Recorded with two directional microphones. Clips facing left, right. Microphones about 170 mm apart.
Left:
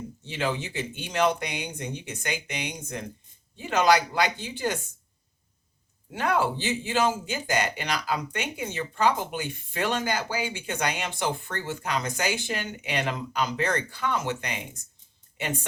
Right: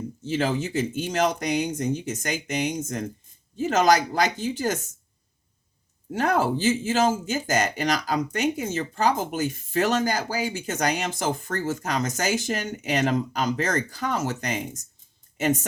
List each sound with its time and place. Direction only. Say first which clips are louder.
0.3 s speech: right 5 dB; 40° right (ahead or behind)
6.1 s speech: right 3 dB; 40° right (ahead or behind)